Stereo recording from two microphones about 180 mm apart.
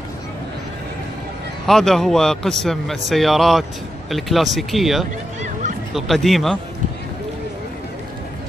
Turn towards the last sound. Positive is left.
turn(degrees=0)  # may be behind; listen again after turning